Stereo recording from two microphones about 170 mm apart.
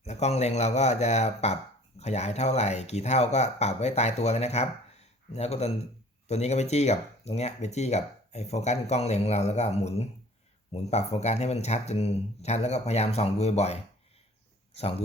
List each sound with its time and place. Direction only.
0.0 s speech: 40° left (ahead or behind)